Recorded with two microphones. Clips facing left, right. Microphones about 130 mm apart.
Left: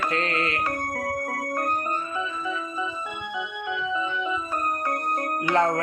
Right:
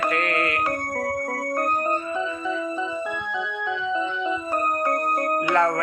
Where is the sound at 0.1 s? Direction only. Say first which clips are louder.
Right 2 dB; 25° left (ahead or behind).